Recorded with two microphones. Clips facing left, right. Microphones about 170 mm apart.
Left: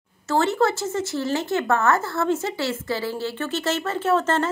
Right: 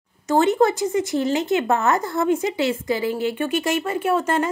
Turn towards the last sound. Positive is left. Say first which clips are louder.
# right 1 dB
turn(degrees=-10)  # may be behind; listen again after turning